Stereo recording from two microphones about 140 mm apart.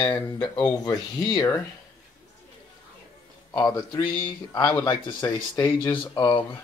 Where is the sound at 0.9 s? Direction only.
25° left (ahead or behind).